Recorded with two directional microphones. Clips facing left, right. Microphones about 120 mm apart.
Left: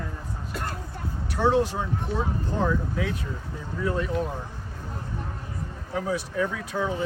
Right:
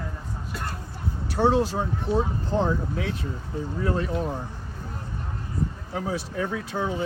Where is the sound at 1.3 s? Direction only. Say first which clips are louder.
Right 1 dB; 30° right (ahead or behind).